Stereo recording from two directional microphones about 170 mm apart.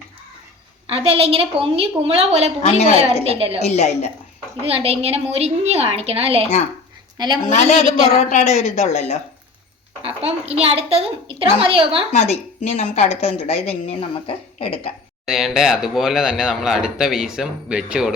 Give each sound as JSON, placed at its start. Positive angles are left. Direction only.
{"t": 0.9, "sound": "a woman's voice", "side_deg": -35}
{"t": 2.6, "sound": "a woman's voice", "side_deg": 40}
{"t": 2.9, "sound": "a woman's voice", "side_deg": -35}
{"t": 3.6, "sound": "a woman's voice", "side_deg": 40}
{"t": 4.6, "sound": "a woman's voice", "side_deg": -35}
{"t": 7.2, "sound": "a woman's voice", "side_deg": -25}
{"t": 7.5, "sound": "a woman's voice", "side_deg": 40}
{"t": 10.2, "sound": "a woman's voice", "side_deg": -35}
{"t": 12.1, "sound": "a woman's voice", "side_deg": 40}
{"t": 15.3, "sound": "speech", "side_deg": 0}